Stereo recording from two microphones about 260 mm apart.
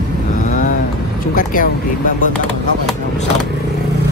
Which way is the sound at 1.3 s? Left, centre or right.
Left.